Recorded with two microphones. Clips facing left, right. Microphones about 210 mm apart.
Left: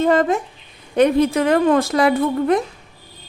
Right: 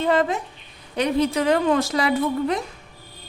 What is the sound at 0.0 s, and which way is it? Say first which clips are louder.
A woman's voice: left 4 dB; 45° left (ahead or behind).